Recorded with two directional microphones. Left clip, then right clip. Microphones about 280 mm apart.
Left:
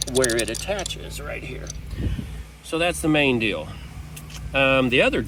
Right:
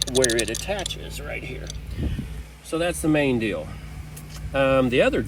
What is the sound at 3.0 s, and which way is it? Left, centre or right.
Speech, left.